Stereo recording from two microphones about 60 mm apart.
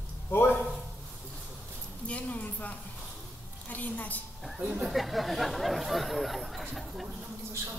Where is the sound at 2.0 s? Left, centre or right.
Left.